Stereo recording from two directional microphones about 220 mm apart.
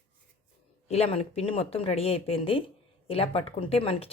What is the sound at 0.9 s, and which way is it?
Speech, 30° left (ahead or behind).